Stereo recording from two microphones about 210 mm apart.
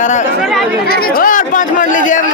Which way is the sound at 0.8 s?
45° left (ahead or behind).